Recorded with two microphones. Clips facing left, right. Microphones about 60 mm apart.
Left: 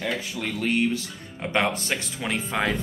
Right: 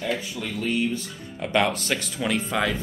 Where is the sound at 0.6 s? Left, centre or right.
Left.